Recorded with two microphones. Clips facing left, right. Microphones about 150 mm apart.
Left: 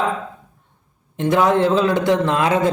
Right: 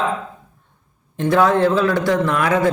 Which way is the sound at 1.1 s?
20° left (ahead or behind).